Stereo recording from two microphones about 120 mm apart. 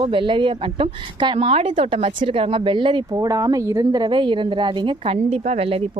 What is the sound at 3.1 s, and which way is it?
Speech, 30° right (ahead or behind).